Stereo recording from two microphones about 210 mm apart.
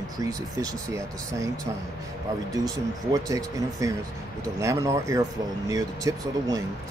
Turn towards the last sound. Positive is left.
turn(degrees=-15)  # may be behind; listen again after turning